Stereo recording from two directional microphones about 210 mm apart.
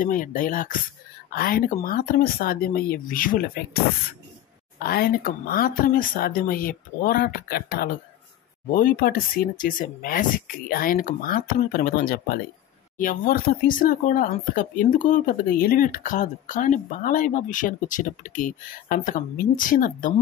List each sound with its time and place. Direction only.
0.0 s speech: 40° left (ahead or behind)